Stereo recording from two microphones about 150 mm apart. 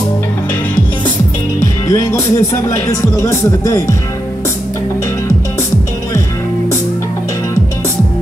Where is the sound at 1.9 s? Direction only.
20° left (ahead or behind).